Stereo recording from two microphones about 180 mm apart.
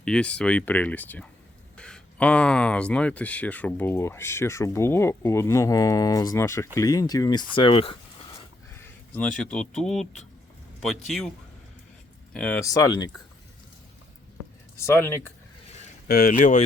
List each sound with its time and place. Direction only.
0.0 s speech: 5° left (ahead or behind); by 8.4 s 30° left (ahead or behind)
8.8 s speech: 10° left (ahead or behind)
12.3 s speech: 5° left (ahead or behind)
12.6 s speech: 20° left (ahead or behind)
14.8 s speech: 15° left (ahead or behind)
16.0 s speech: 55° left (ahead or behind)
16.4 s speech: 40° left (ahead or behind)